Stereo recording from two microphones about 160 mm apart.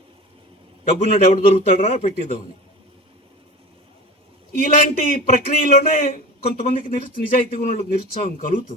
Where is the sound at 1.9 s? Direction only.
60° left (ahead or behind).